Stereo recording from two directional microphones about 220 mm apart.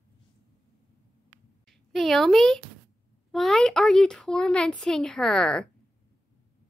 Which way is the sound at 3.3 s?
Centre (ahead or behind).